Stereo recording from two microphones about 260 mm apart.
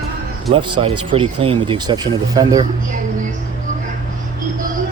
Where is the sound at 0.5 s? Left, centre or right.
Right.